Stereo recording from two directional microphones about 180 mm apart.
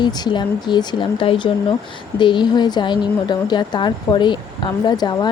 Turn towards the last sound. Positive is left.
turn(degrees=25)  # may be behind; listen again after turning